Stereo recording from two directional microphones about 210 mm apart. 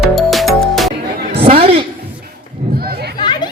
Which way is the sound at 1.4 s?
25° right (ahead or behind).